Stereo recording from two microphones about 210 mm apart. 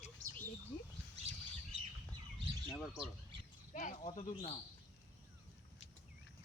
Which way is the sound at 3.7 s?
35° left (ahead or behind).